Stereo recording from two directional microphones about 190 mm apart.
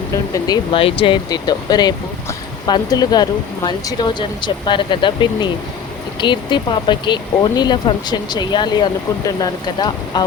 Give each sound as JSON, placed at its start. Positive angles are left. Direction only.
{"t": 0.3, "sound": "speech", "side_deg": 20}